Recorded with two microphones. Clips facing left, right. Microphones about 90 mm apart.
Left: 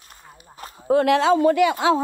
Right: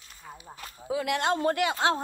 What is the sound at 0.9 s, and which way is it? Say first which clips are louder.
Speech: left 12 dB; 90° left.